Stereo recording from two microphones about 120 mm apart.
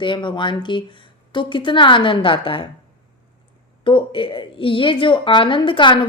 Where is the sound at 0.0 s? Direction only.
40° left (ahead or behind).